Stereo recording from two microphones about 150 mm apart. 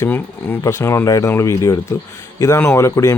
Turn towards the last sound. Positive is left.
turn(degrees=20)  # may be behind; listen again after turning